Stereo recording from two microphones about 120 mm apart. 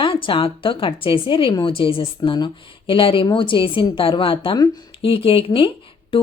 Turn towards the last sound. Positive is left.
turn(degrees=50)  # may be behind; listen again after turning